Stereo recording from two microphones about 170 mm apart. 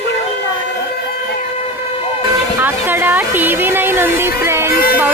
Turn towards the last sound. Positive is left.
turn(degrees=60)  # may be behind; listen again after turning